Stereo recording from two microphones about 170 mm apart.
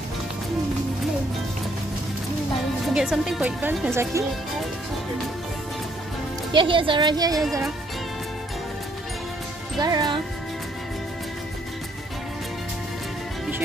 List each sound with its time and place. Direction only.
2.9 s speech: 5° right (ahead or behind)
6.5 s speech: 30° right (ahead or behind)
9.8 s speech: 25° right (ahead or behind)